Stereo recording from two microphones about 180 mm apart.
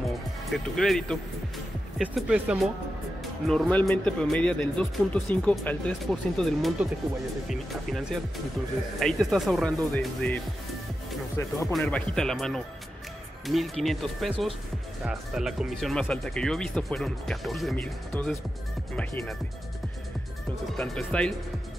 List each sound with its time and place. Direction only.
0.5 s speech: centre (ahead or behind)
11.8 s speech: 5° left (ahead or behind)
20.7 s speech: 5° left (ahead or behind)